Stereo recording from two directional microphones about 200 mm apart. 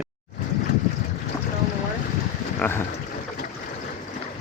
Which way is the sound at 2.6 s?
10° left (ahead or behind).